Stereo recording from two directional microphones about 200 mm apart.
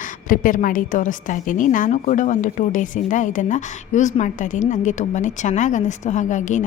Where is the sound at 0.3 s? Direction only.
45° left (ahead or behind).